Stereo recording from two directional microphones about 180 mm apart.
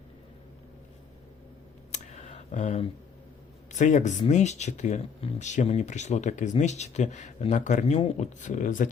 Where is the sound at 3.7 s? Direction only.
45° left (ahead or behind).